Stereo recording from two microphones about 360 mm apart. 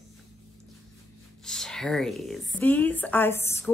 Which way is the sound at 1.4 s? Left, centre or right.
Centre.